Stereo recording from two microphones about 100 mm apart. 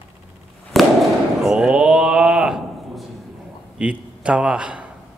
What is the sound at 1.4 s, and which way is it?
A man's voice, 5° right (ahead or behind).